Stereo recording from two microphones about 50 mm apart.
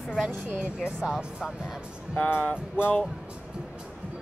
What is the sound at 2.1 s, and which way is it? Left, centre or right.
Speech, left.